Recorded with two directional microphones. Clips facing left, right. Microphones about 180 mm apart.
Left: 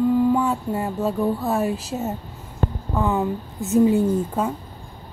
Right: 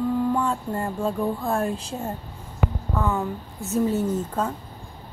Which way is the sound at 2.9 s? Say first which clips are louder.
Left 5 dB; 15° left (ahead or behind).